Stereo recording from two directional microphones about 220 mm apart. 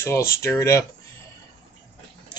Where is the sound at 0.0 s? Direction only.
10° left (ahead or behind).